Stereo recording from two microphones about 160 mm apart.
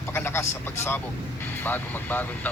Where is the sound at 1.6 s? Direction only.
10° left (ahead or behind).